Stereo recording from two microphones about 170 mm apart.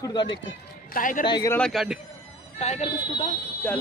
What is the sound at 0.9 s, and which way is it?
Speech, 55° left (ahead or behind).